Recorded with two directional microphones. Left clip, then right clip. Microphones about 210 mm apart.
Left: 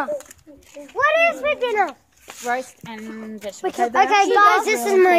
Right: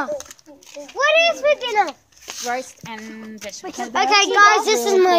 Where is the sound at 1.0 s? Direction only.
10° left (ahead or behind).